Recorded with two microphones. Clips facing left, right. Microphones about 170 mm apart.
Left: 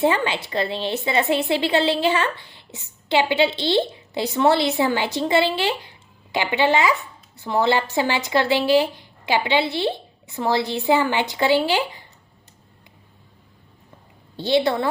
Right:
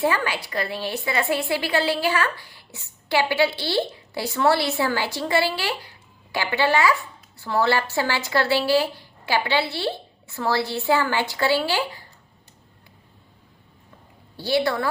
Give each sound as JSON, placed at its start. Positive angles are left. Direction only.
{"t": 0.0, "sound": "a woman's voice", "side_deg": 25}
{"t": 14.3, "sound": "a woman's voice", "side_deg": 20}